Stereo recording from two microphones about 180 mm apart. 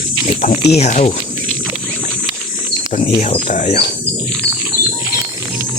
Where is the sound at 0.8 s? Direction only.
35° left (ahead or behind).